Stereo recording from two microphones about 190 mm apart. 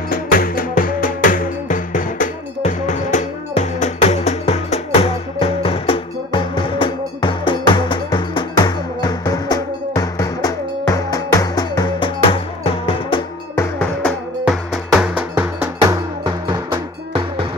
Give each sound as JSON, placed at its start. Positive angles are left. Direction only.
{"t": 0.1, "sound": "music", "side_deg": 50}
{"t": 13.6, "sound": "music", "side_deg": 5}
{"t": 14.4, "sound": "cowbell", "side_deg": 0}
{"t": 16.3, "sound": "music", "side_deg": -25}